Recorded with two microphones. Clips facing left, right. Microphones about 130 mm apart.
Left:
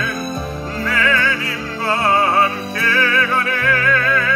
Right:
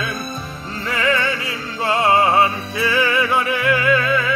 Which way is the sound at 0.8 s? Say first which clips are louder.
Even; 15° right (ahead or behind).